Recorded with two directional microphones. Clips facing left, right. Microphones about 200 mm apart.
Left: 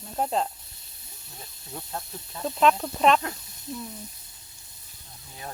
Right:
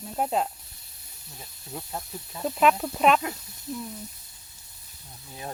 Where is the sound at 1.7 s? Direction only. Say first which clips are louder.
Right 1 dB; 5° right (ahead or behind).